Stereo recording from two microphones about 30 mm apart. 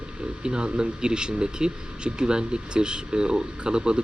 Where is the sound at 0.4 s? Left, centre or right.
Right.